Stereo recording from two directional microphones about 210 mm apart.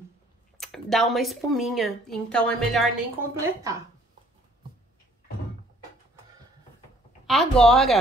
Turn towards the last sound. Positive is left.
turn(degrees=0)  # may be behind; listen again after turning